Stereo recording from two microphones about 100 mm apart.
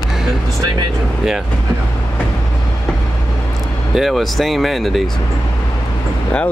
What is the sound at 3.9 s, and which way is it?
Speech, centre (ahead or behind).